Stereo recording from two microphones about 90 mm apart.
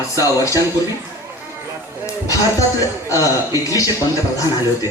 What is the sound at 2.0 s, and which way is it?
Music, 35° left (ahead or behind).